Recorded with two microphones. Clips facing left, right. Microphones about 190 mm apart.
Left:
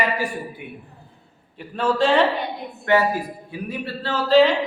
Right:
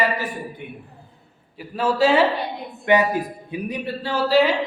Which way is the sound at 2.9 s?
20° right (ahead or behind).